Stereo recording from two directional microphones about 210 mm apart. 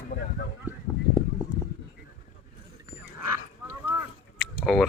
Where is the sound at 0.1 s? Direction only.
45° left (ahead or behind).